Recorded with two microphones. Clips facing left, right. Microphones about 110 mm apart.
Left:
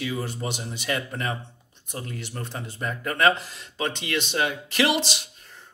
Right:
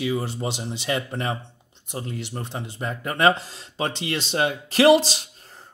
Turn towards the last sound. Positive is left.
turn(degrees=-40)  # may be behind; listen again after turning